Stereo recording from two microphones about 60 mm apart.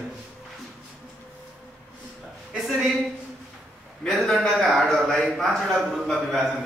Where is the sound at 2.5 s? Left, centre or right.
Centre.